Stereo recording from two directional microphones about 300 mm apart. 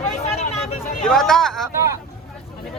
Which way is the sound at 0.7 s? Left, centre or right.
Centre.